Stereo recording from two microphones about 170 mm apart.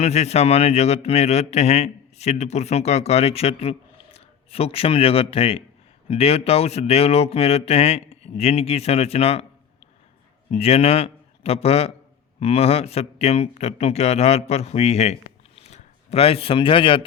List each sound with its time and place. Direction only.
0.0 s speech: 40° left (ahead or behind)
10.5 s a man's voice: 35° left (ahead or behind)